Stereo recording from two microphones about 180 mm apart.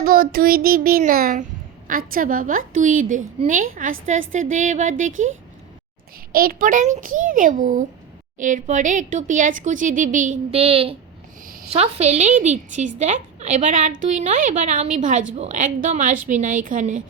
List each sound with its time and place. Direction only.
0.0 s speech: 55° right (ahead or behind)
6.3 s a woman's voice: 55° right (ahead or behind)